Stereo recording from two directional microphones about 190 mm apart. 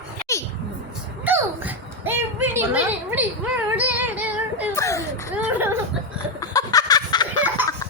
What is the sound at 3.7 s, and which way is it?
Music, 10° right (ahead or behind).